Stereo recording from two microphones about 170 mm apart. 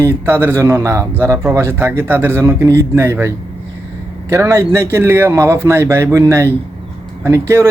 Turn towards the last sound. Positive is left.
turn(degrees=-15)  # may be behind; listen again after turning